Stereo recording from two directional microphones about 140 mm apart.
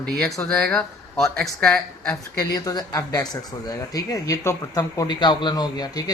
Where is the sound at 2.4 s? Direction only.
25° left (ahead or behind).